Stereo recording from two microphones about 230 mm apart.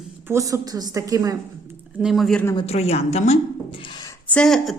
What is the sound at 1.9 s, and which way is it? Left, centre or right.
Speech, centre.